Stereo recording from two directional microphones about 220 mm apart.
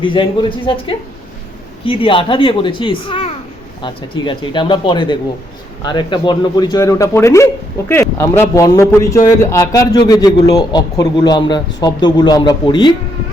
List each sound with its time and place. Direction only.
0.0 s a man's voice: 20° left (ahead or behind)